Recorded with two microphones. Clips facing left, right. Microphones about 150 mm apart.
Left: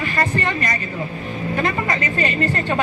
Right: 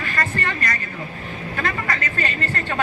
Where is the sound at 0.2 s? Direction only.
20° left (ahead or behind).